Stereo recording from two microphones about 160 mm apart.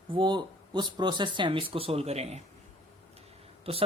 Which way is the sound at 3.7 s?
40° right (ahead or behind).